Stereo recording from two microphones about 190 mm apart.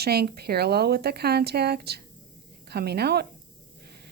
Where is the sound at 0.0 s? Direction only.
55° right (ahead or behind).